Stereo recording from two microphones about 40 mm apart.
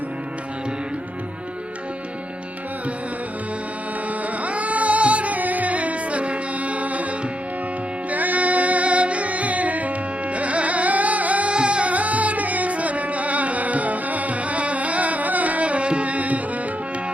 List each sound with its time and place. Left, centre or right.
4.4 s music: right
8.1 s music: right
11.5 s music: right